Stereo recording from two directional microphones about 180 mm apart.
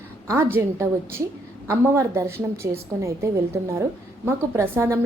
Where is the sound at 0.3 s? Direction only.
15° right (ahead or behind).